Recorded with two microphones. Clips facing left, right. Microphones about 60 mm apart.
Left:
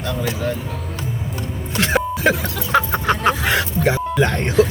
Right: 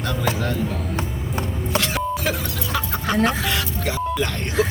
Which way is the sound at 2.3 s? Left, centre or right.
Left.